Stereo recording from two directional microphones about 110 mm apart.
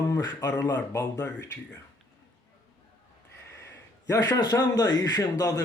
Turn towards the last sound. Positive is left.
turn(degrees=35)  # may be behind; listen again after turning